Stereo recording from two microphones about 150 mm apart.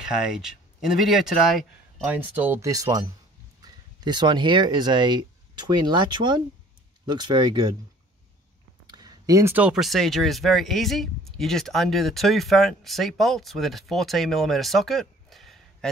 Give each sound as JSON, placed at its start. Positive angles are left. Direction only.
{"t": 0.0, "sound": "speech", "side_deg": -5}
{"t": 8.8, "sound": "speech", "side_deg": -25}